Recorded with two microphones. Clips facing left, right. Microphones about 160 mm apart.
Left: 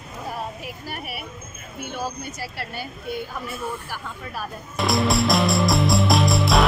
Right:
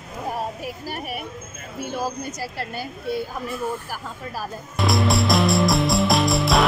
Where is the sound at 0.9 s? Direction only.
40° right (ahead or behind).